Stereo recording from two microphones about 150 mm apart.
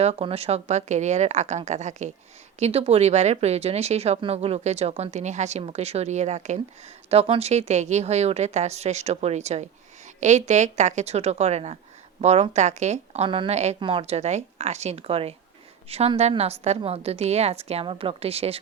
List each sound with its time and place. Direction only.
0.0 s speech: 40° right (ahead or behind)
13.2 s a woman's voice: 35° right (ahead or behind)
13.7 s speech: 35° right (ahead or behind)